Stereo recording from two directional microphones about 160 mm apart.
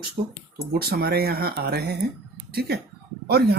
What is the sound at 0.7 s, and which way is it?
Speech, 75° right (ahead or behind).